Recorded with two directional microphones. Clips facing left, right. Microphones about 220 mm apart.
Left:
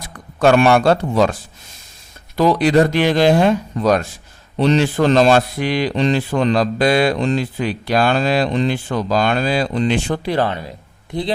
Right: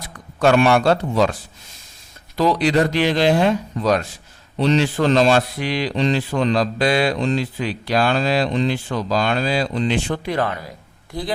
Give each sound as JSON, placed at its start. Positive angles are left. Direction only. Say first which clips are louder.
{"t": 0.4, "sound": "a man's voice", "louder": "left 2 dB", "side_deg": 50}
{"t": 10.2, "sound": "speech", "louder": "left 3 dB", "side_deg": 30}